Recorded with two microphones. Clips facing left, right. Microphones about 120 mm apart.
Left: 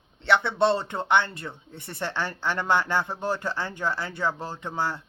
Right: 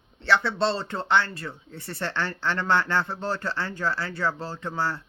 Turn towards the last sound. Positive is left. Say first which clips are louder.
# even
turn(degrees=15)  # may be behind; listen again after turning